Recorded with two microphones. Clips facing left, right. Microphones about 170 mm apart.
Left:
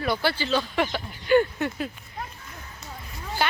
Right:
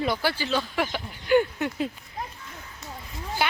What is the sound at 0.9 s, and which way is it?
Speech, 10° right (ahead or behind).